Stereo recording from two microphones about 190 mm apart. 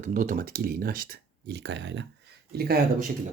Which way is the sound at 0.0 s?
45° right (ahead or behind).